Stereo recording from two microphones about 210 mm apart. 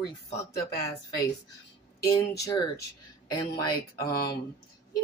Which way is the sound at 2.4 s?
15° left (ahead or behind).